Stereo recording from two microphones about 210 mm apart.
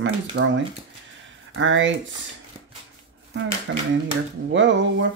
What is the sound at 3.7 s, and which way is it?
Speech, 65° right (ahead or behind).